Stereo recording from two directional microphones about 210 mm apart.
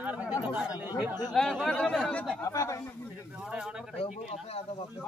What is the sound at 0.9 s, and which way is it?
Speech, 5° right (ahead or behind).